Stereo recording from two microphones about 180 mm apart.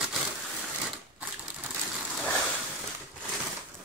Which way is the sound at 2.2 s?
5° left (ahead or behind).